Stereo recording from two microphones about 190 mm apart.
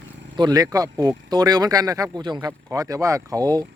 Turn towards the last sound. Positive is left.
turn(degrees=-20)  # may be behind; listen again after turning